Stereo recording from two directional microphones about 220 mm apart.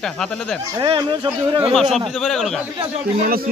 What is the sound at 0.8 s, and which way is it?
Speech, 20° right (ahead or behind).